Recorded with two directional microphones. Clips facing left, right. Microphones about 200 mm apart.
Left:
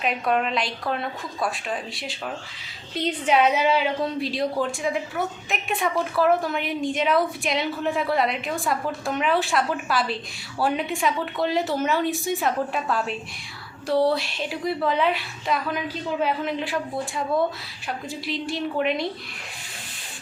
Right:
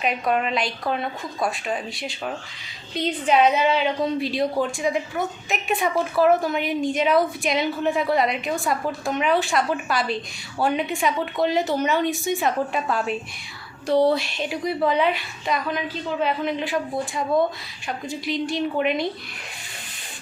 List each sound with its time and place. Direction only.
0.0 s a woman's voice: centre (ahead or behind)
17.8 s a woman's voice: centre (ahead or behind)